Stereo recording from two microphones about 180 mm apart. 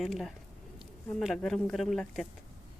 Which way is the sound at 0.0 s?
Centre (ahead or behind).